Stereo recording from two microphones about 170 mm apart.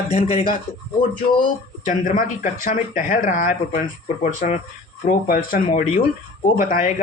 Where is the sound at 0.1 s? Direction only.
40° left (ahead or behind).